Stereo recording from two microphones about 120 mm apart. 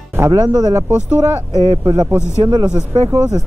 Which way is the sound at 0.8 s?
10° right (ahead or behind).